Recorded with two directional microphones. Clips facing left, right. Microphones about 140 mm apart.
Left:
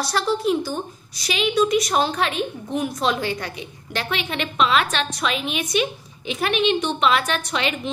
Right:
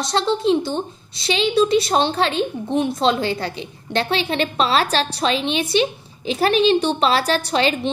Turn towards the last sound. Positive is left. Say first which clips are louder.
# right 6 dB
turn(degrees=-35)  # may be behind; listen again after turning